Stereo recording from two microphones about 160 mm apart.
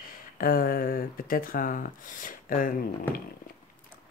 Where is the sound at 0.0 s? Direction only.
65° left (ahead or behind).